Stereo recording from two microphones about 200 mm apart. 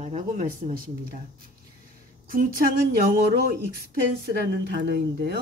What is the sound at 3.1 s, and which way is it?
A woman's voice, 50° right (ahead or behind).